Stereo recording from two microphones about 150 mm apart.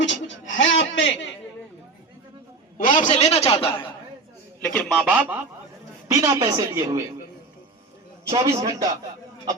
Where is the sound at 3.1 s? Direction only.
45° left (ahead or behind).